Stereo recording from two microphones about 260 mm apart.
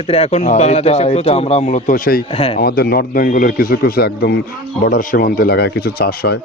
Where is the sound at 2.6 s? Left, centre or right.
Left.